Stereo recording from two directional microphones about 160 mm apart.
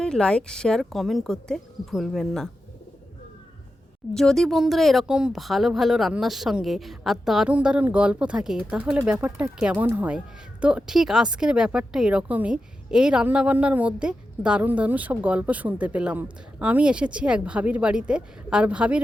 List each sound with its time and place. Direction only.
0.0 s speech: 5° left (ahead or behind)
4.1 s speech: 5° left (ahead or behind)